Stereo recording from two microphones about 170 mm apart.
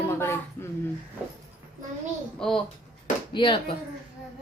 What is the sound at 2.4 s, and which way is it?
Speech, centre (ahead or behind).